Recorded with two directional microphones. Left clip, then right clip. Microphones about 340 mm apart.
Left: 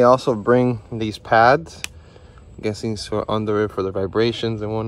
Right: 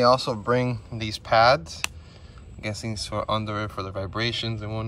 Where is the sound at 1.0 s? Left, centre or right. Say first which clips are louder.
Left 4 dB; centre.